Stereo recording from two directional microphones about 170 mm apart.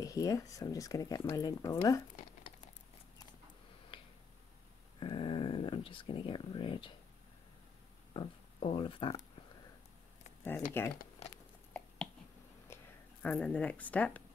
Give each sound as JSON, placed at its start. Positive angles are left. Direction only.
{"t": 0.0, "sound": "speech", "side_deg": 20}
{"t": 3.9, "sound": "finger snapping", "side_deg": 30}
{"t": 5.0, "sound": "a sound", "side_deg": 30}
{"t": 8.1, "sound": "speech", "side_deg": 30}
{"t": 10.8, "sound": "speech", "side_deg": 15}
{"t": 12.7, "sound": "a sound", "side_deg": 15}
{"t": 13.2, "sound": "speech", "side_deg": 5}